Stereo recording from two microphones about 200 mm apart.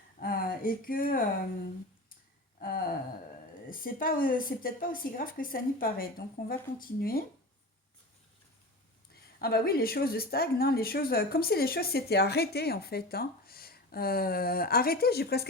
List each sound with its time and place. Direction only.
0.2 s a sound: 45° left (ahead or behind)
2.6 s a woman's voice: 50° left (ahead or behind)
9.1 s a woman's voice: 50° left (ahead or behind)